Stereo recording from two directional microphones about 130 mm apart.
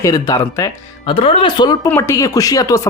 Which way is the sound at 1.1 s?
45° left (ahead or behind).